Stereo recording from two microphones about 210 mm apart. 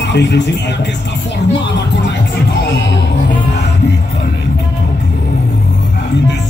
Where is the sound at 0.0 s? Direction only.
55° left (ahead or behind).